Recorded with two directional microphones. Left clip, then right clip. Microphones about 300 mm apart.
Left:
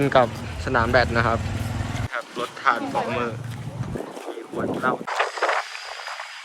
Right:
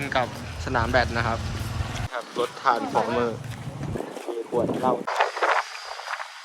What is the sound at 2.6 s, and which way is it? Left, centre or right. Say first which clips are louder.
Speech: left 1 dB; centre.